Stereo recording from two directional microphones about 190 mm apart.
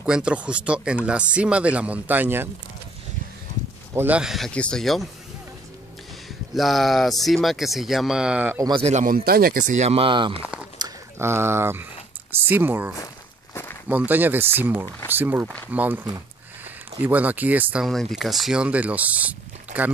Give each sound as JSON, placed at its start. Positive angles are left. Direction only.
{"t": 0.0, "sound": "speech", "side_deg": -5}
{"t": 3.9, "sound": "speech", "side_deg": -10}
{"t": 6.5, "sound": "speech", "side_deg": 0}
{"t": 8.8, "sound": "speech", "side_deg": -40}
{"t": 10.4, "sound": "a sound", "side_deg": -5}
{"t": 10.8, "sound": "speech", "side_deg": -15}